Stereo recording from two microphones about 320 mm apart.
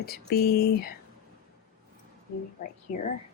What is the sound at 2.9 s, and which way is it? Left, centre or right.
Speech, left.